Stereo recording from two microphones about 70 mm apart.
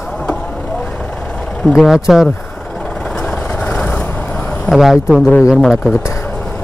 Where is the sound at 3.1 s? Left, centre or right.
Centre.